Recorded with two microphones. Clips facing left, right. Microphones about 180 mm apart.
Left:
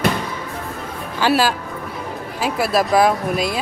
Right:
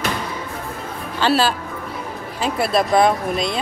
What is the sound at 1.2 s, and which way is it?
Speech, 10° left (ahead or behind).